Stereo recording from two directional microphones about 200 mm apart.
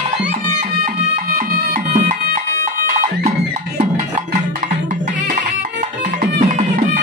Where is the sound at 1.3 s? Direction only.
40° right (ahead or behind).